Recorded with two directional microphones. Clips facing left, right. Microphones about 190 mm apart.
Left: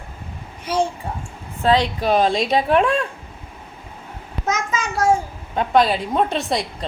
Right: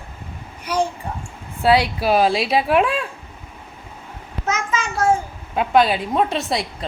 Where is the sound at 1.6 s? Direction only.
10° right (ahead or behind).